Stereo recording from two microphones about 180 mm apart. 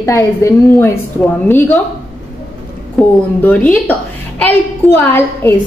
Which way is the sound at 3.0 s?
5° left (ahead or behind).